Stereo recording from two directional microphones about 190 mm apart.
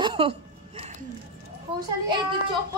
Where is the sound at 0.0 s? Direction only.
25° right (ahead or behind).